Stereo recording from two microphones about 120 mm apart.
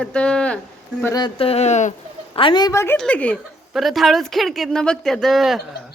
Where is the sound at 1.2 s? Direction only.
50° left (ahead or behind); by 1.9 s 70° left (ahead or behind).